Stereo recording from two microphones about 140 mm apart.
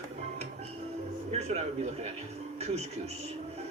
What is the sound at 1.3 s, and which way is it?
Speech, 50° right (ahead or behind).